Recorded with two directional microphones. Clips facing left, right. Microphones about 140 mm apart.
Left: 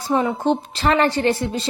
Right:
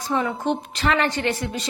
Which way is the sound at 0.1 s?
25° left (ahead or behind).